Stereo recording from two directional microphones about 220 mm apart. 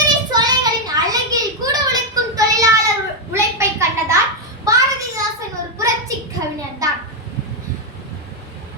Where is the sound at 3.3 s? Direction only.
10° right (ahead or behind).